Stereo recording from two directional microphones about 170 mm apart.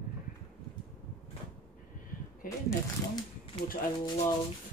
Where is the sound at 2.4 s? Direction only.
55° left (ahead or behind).